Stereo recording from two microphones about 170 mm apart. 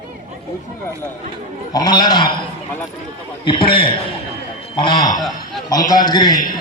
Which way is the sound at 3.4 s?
30° left (ahead or behind).